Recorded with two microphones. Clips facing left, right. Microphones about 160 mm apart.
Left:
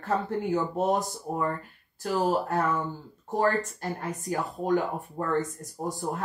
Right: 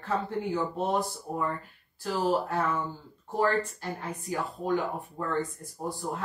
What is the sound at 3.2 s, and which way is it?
Speech, 40° left (ahead or behind).